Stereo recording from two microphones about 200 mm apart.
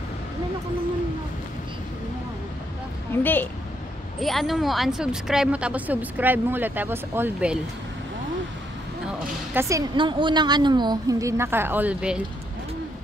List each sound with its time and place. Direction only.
3.1 s speech: 10° left (ahead or behind); by 7.5 s 10° right (ahead or behind)
9.2 s a woman's voice: 10° right (ahead or behind)